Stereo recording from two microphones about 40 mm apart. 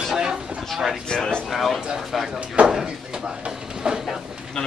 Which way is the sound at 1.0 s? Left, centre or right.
Centre.